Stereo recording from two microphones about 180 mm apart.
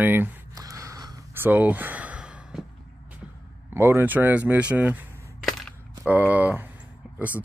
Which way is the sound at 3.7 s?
10° right (ahead or behind).